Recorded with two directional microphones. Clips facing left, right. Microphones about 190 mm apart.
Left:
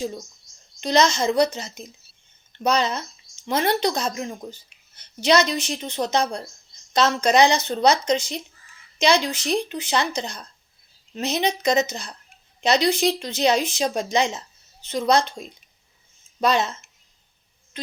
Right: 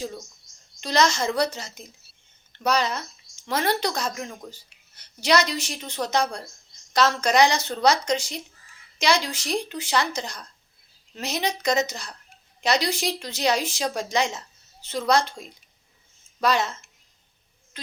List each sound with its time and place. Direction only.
0.8 s a woman's voice: 20° left (ahead or behind)